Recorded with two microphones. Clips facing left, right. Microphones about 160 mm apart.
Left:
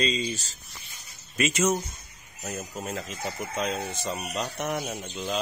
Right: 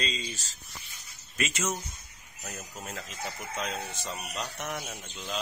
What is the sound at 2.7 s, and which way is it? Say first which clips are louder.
Speech: left 7 dB; 20° left (ahead or behind).